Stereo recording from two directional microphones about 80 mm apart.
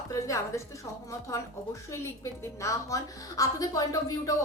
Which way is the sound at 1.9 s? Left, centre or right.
Left.